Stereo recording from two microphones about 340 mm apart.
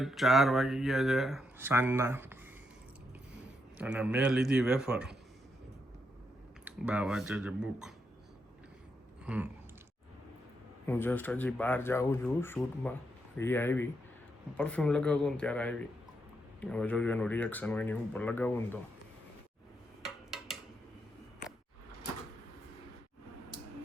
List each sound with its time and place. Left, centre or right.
0.0 s speech: centre
3.8 s speech: centre
6.7 s speech: centre
9.2 s chewing: centre
10.8 s speech: centre
20.1 s a sound: centre